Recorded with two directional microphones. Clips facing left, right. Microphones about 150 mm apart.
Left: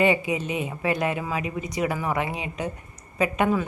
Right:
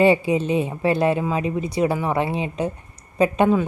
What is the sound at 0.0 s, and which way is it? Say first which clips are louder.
Speech: right 5 dB; 30° right (ahead or behind).